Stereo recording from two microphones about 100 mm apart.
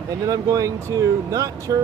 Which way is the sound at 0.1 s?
35° right (ahead or behind).